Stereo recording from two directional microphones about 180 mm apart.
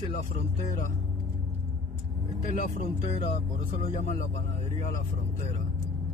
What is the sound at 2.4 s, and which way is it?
Speech, 45° left (ahead or behind).